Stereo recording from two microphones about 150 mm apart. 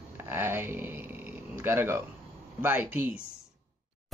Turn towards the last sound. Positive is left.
turn(degrees=-10)  # may be behind; listen again after turning